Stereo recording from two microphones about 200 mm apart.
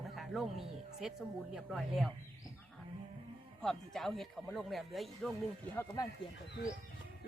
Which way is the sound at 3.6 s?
Centre (ahead or behind).